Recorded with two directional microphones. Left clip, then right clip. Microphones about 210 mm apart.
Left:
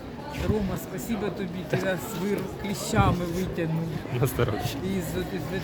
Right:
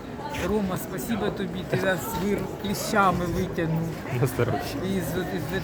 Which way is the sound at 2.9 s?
15° left (ahead or behind).